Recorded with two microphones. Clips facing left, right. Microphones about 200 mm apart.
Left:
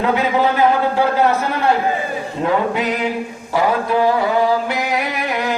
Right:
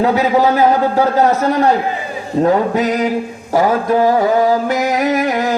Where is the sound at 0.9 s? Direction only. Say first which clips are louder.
Right 3 dB; 40° right (ahead or behind).